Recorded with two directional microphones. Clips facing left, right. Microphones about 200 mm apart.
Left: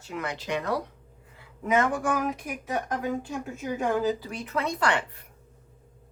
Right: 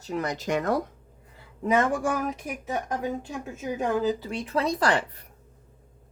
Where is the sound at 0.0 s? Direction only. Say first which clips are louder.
Right 4 dB; 40° right (ahead or behind).